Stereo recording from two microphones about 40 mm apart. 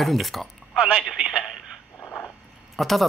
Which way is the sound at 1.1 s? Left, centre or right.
Centre.